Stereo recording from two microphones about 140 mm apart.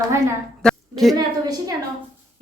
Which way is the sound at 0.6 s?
5° left (ahead or behind).